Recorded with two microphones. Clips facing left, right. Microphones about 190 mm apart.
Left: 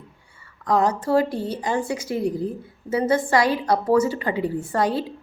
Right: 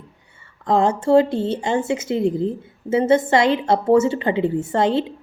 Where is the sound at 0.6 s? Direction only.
25° right (ahead or behind).